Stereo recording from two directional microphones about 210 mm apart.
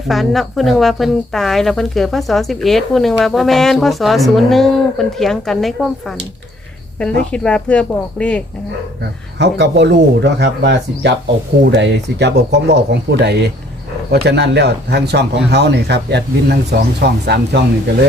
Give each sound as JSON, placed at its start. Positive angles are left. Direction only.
{"t": 0.1, "sound": "a woman's voice", "side_deg": 0}
{"t": 9.4, "sound": "speech", "side_deg": -55}